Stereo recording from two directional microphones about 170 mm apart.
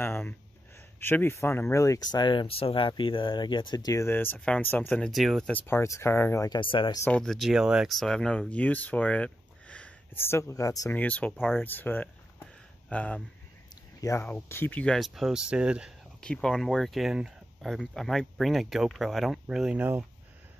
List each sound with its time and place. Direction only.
0.0 s a sound: 15° left (ahead or behind)
0.9 s speech: 10° left (ahead or behind); by 7.0 s 30° left (ahead or behind)
7.1 s speech: 5° left (ahead or behind); by 11.0 s 20° left (ahead or behind)
11.0 s speech: 10° left (ahead or behind)
11.3 s speech: centre (ahead or behind)
11.6 s speech: 10° left (ahead or behind); by 15.9 s 5° right (ahead or behind)
16.2 s speech: 5° left (ahead or behind)